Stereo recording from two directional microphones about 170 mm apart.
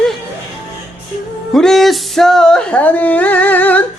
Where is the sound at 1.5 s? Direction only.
Centre (ahead or behind).